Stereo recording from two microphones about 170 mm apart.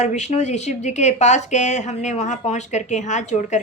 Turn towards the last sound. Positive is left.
turn(degrees=45)  # may be behind; listen again after turning